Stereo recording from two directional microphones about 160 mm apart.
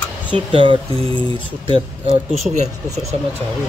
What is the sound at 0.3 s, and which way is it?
Speech, 35° right (ahead or behind).